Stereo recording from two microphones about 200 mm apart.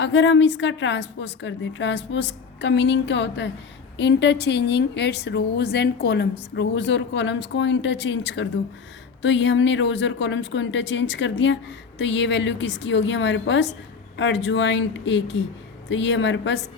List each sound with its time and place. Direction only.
0.0 s a woman's voice: 65° left (ahead or behind)